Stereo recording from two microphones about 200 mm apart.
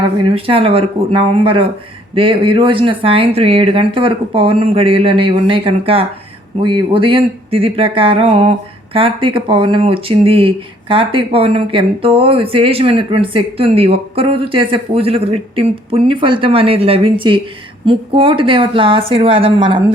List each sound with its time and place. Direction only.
0.2 s speech: 25° right (ahead or behind)